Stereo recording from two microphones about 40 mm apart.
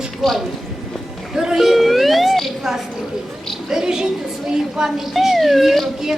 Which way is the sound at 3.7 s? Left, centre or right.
Centre.